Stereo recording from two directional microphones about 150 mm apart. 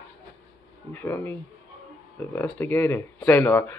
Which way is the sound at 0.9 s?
15° left (ahead or behind).